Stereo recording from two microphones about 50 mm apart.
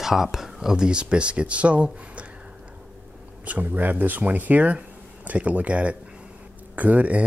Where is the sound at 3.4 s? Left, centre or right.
Right.